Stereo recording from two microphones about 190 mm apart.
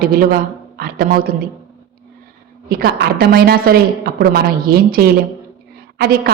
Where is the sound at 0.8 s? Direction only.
50° right (ahead or behind).